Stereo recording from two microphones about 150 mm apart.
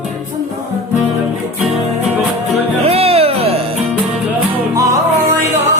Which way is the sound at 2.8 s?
40° right (ahead or behind).